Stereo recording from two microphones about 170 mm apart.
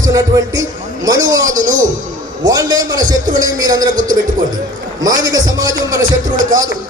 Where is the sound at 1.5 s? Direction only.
50° right (ahead or behind).